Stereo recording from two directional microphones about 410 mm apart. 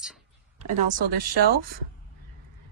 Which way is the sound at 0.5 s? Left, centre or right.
Centre.